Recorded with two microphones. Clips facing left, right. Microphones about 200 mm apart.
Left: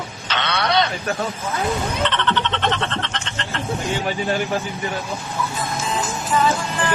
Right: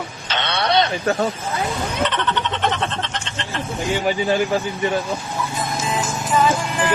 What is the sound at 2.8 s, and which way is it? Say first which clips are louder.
Frog: right 1 dB; 15° right (ahead or behind).